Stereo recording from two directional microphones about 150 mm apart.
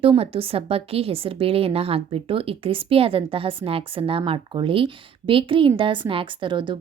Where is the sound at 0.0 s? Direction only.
40° right (ahead or behind).